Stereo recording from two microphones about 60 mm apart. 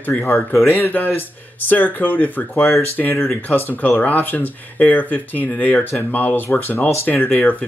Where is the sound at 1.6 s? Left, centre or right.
Left.